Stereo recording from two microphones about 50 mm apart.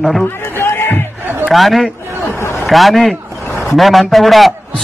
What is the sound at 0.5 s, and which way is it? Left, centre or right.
Crowd, left.